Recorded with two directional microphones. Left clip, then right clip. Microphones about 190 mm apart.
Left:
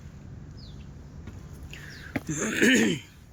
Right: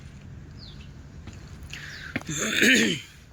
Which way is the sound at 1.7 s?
15° left (ahead or behind).